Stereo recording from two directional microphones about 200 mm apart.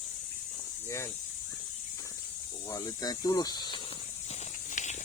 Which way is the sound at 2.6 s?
20° left (ahead or behind).